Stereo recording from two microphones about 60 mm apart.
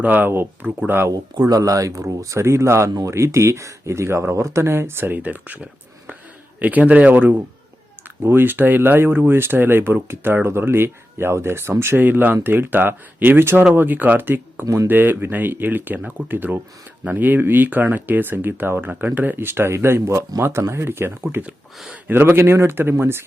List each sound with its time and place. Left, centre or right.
0.0 s a man's voice: right
0.3 s speech: right
1.0 s a man's voice: right
16.0 s a man's voice: right
16.3 s speech: right